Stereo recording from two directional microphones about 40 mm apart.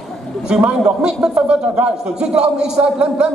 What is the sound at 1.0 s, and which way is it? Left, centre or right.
A man's voice, right.